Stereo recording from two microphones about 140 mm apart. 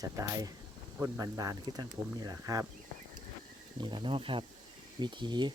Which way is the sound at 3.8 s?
35° right (ahead or behind).